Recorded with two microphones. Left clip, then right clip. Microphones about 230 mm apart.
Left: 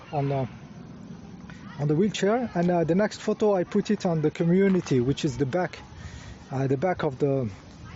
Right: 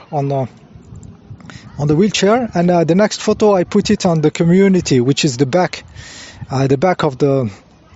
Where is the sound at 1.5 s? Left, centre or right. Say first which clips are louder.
Right 10 dB; right.